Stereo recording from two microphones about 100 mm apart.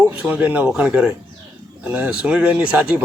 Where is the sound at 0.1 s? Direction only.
15° right (ahead or behind).